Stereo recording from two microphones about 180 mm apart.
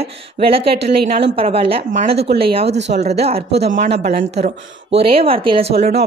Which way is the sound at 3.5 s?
60° right (ahead or behind).